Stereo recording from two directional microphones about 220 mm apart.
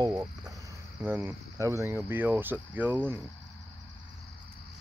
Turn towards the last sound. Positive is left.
turn(degrees=-10)  # may be behind; listen again after turning